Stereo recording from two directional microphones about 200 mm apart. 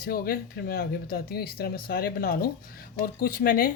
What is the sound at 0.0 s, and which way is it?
Speech, 45° left (ahead or behind).